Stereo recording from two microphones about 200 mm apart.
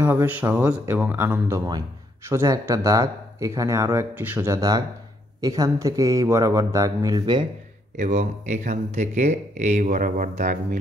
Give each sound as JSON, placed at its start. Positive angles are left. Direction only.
{"t": 0.0, "sound": "speech", "side_deg": -10}
{"t": 8.0, "sound": "speech", "side_deg": -35}